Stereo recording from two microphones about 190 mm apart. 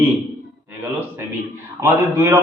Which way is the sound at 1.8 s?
15° right (ahead or behind).